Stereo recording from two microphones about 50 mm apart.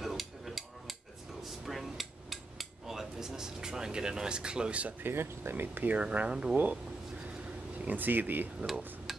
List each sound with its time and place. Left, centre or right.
0.0 s a sound: centre
1.7 s hammer: centre
2.9 s a sound: centre; by 4.9 s right
5.0 s speech: right
5.9 s speech: right
7.8 s speech: right